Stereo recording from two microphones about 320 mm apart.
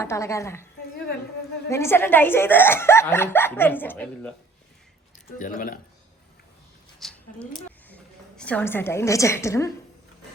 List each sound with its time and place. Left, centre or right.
0.0 s speech: centre
1.7 s speech: centre
5.1 s speech: left
7.0 s a sound: centre
8.4 s speech: centre